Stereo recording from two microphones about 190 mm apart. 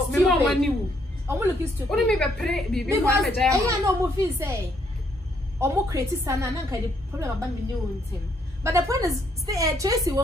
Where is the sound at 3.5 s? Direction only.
15° right (ahead or behind).